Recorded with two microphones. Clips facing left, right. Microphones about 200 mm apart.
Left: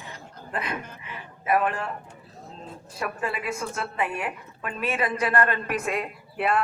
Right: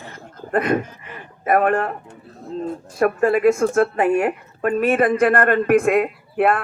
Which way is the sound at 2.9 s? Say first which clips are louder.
Right 14 dB; 50° right (ahead or behind).